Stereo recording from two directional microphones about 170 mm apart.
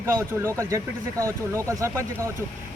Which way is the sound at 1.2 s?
15° right (ahead or behind).